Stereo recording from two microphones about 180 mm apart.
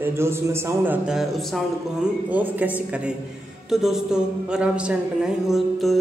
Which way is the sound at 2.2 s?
10° right (ahead or behind).